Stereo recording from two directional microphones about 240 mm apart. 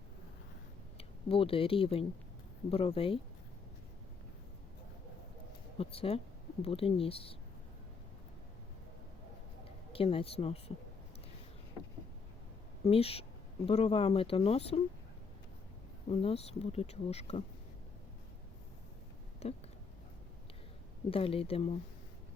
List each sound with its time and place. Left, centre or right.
0.9 s speech: left
5.8 s speech: left
9.9 s speech: left
12.8 s speech: left
16.0 s speech: left
19.4 s speech: left
21.1 s speech: left